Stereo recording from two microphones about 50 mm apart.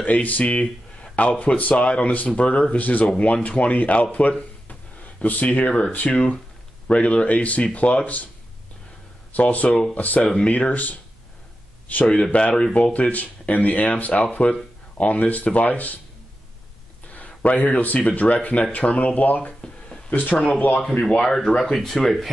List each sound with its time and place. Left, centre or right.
0.0 s speech: left
5.7 s speech: left
9.3 s speech: left
17.1 s speech: left
20.3 s speech: centre